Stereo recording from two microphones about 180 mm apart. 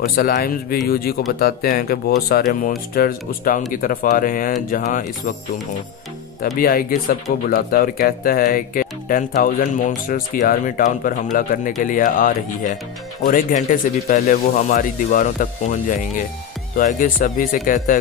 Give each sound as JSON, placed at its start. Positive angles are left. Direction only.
{"t": 0.0, "sound": "speech", "side_deg": 55}
{"t": 6.6, "sound": "speech", "side_deg": 55}